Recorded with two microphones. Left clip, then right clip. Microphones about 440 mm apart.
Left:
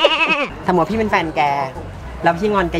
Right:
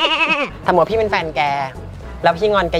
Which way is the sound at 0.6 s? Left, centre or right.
Right.